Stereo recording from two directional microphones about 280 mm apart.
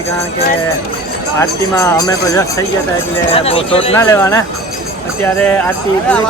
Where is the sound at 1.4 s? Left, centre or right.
Centre.